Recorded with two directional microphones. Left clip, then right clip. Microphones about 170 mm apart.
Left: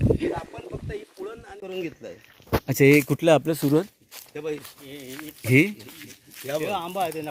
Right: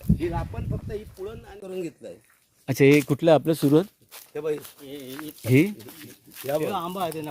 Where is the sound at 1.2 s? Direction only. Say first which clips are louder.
Left 1 dB; 35° left (ahead or behind).